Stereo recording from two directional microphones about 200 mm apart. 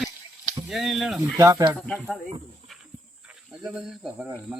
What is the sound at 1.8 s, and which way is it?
Speech, 5° left (ahead or behind).